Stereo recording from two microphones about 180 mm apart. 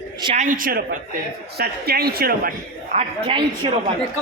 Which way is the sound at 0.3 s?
45° right (ahead or behind).